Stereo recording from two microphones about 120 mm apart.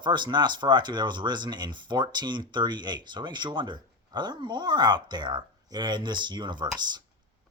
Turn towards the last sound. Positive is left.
turn(degrees=-35)  # may be behind; listen again after turning